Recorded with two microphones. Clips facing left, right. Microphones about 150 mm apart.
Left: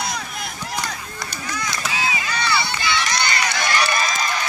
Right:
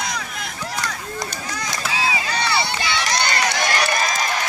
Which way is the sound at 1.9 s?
30° right (ahead or behind).